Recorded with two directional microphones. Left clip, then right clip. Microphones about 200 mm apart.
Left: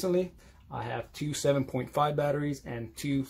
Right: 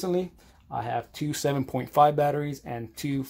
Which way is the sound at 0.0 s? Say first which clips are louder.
Even; 30° right (ahead or behind).